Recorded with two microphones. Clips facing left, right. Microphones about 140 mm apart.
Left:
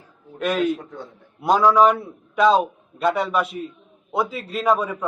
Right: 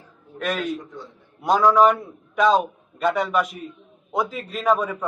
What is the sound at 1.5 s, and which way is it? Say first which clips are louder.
A man's voice: even; 10° left (ahead or behind).